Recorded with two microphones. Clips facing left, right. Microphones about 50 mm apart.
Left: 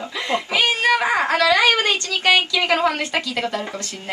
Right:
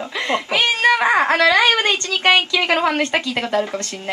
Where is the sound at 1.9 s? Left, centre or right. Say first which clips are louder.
Right 1 dB; centre.